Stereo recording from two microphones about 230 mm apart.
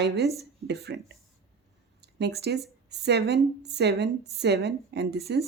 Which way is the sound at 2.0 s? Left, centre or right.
Right.